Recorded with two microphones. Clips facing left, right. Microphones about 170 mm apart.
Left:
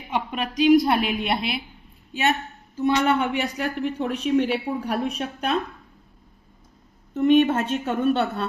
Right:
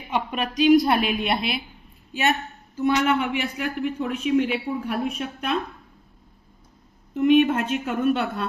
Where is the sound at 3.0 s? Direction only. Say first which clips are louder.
Left 1 dB; 40° left (ahead or behind).